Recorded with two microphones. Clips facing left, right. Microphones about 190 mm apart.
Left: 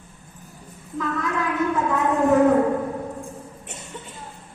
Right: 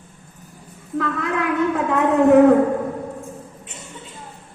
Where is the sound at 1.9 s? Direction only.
65° right (ahead or behind).